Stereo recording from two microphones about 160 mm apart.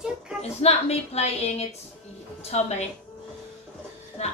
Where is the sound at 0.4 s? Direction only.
40° left (ahead or behind).